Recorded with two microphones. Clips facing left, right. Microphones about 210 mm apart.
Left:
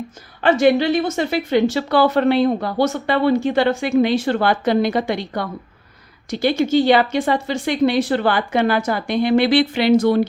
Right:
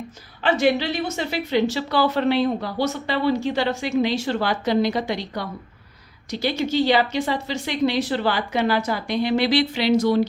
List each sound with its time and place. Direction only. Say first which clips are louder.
0.4 s a woman's voice: left 5 dB; 50° left (ahead or behind)